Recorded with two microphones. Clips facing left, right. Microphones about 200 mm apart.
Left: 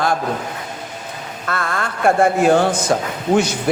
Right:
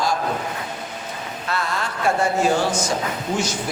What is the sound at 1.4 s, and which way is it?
A man's voice, 55° left (ahead or behind).